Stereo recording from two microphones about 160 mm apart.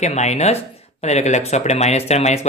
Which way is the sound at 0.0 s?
45° left (ahead or behind).